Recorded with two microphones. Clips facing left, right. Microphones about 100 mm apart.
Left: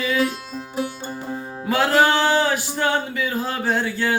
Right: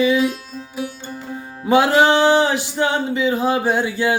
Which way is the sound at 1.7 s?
20° right (ahead or behind).